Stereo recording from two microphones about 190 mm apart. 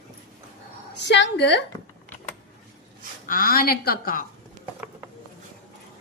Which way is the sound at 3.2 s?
50° left (ahead or behind).